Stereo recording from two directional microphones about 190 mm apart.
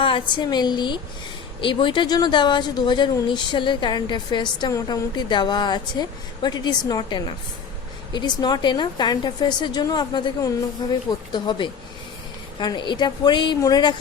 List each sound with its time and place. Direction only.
0.0 s speech: 25° left (ahead or behind)